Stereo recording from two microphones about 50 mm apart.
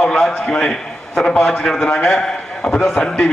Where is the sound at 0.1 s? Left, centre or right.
Centre.